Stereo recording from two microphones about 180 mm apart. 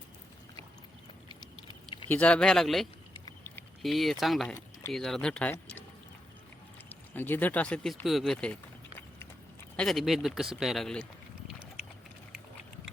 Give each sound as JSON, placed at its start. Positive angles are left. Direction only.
{"t": 1.3, "sound": "a sound", "side_deg": 25}
{"t": 2.0, "sound": "speech", "side_deg": 10}
{"t": 3.8, "sound": "speech", "side_deg": 0}
{"t": 7.1, "sound": "speech", "side_deg": 10}
{"t": 9.7, "sound": "speech", "side_deg": 0}